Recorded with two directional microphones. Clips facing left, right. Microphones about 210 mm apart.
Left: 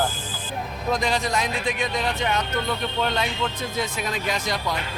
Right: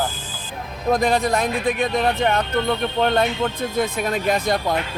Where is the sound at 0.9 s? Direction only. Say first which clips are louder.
Right 6 dB; 55° right (ahead or behind).